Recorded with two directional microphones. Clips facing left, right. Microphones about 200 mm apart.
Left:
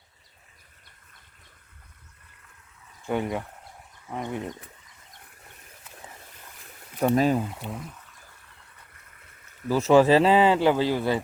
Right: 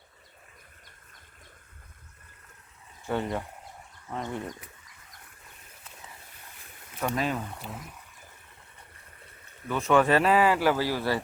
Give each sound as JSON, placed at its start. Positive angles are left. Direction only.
{"t": 3.1, "sound": "speech", "side_deg": 15}
{"t": 7.2, "sound": "speech", "side_deg": 35}
{"t": 7.4, "sound": "speech", "side_deg": 5}
{"t": 9.6, "sound": "speech", "side_deg": 30}